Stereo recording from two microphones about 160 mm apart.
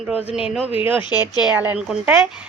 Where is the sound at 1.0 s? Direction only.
25° left (ahead or behind).